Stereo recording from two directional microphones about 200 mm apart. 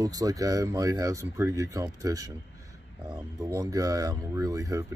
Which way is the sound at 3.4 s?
15° right (ahead or behind).